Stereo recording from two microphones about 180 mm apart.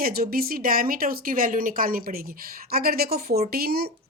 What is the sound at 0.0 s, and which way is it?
A woman's voice, 55° right (ahead or behind).